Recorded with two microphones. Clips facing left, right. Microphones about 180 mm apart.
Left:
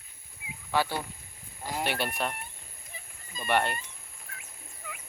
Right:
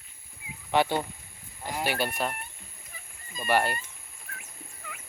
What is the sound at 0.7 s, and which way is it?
Speech, 20° right (ahead or behind).